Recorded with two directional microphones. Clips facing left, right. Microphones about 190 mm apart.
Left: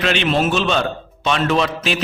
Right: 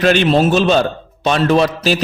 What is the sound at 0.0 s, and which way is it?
A man's voice, 40° right (ahead or behind).